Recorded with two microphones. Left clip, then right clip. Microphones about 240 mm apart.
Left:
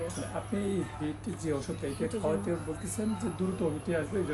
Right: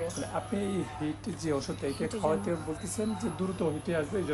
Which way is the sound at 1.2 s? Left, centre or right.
Right.